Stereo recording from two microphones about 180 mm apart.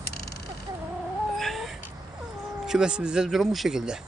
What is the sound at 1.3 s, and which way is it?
Cat, centre (ahead or behind).